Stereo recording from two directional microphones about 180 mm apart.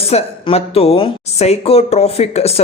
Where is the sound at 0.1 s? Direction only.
35° left (ahead or behind).